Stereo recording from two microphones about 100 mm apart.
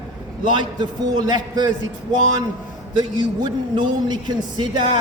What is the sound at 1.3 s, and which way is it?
Speech, 45° right (ahead or behind).